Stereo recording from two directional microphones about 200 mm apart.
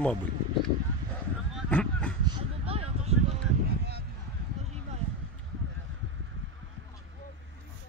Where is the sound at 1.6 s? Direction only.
5° left (ahead or behind).